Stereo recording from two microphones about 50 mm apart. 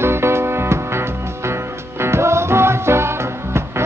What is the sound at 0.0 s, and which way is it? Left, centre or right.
Music, right.